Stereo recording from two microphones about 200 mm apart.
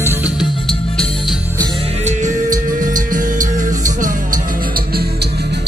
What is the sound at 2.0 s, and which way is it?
Music, 40° right (ahead or behind).